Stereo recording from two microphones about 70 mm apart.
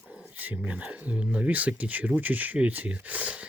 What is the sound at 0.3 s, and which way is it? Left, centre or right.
Speech, right.